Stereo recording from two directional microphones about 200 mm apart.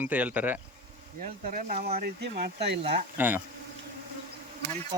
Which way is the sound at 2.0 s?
55° right (ahead or behind).